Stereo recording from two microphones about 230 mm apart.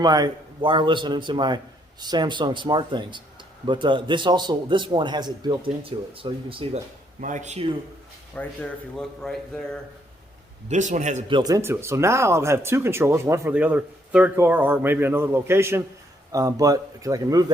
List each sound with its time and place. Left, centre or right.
0.0 s a man's voice: centre
7.2 s speech: right
8.4 s speech: centre
10.7 s speech: right; by 17.4 s centre